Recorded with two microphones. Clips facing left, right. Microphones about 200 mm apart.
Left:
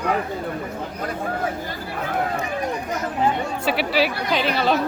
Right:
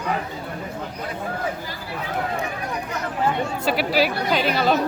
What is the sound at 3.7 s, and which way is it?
Speech, 45° right (ahead or behind).